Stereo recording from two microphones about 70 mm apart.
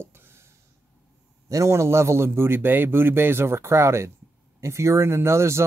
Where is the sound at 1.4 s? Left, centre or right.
Right.